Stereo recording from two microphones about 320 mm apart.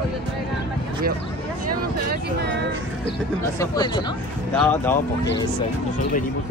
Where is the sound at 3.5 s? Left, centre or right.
Centre.